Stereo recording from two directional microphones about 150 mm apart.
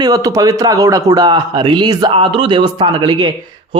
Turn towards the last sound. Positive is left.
turn(degrees=-30)  # may be behind; listen again after turning